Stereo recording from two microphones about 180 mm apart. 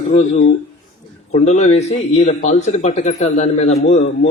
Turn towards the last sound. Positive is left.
turn(degrees=35)  # may be behind; listen again after turning